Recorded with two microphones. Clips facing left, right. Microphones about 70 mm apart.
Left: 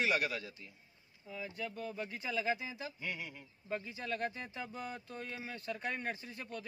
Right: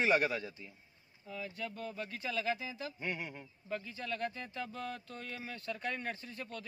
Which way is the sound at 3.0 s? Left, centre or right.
Right.